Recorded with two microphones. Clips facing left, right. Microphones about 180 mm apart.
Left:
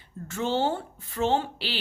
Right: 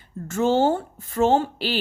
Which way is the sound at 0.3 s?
45° right (ahead or behind).